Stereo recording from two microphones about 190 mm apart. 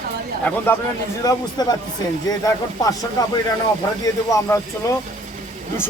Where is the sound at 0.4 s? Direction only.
10° left (ahead or behind).